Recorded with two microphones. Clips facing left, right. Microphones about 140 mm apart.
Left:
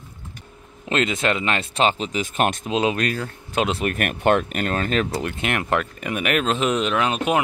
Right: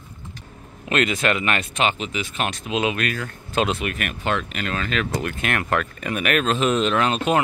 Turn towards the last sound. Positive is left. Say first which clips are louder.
# right 1 dB
turn(degrees=10)  # may be behind; listen again after turning